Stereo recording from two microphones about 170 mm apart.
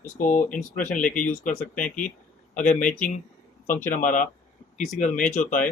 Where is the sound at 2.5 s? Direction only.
45° left (ahead or behind).